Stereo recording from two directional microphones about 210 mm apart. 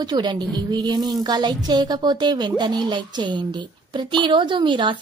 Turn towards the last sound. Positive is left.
turn(degrees=-25)  # may be behind; listen again after turning